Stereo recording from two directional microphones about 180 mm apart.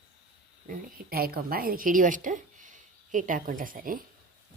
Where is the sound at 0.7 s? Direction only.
55° right (ahead or behind).